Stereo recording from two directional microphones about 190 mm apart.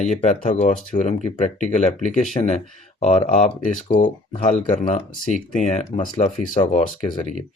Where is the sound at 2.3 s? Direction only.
35° left (ahead or behind).